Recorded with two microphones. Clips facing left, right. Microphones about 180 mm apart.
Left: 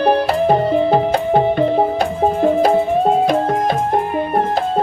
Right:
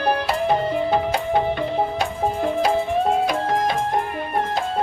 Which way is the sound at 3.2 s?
50° left (ahead or behind).